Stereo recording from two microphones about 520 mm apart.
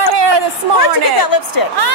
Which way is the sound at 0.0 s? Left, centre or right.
Right.